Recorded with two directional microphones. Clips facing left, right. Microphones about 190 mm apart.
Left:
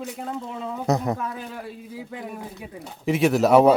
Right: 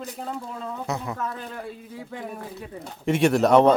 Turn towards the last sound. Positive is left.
turn(degrees=5)  # may be behind; listen again after turning